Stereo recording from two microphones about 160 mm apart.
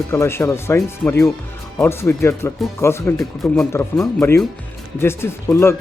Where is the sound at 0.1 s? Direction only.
15° left (ahead or behind).